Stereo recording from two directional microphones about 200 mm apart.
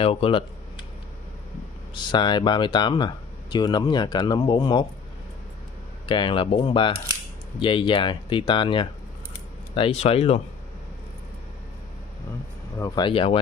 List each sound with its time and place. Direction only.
0.0 s speech: 25° left (ahead or behind)
2.0 s speech: 20° left (ahead or behind)
6.0 s speech: 25° left (ahead or behind)
12.7 s speech: 20° left (ahead or behind)